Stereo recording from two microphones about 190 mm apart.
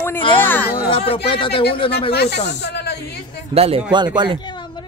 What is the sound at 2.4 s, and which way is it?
Snake, 60° left (ahead or behind).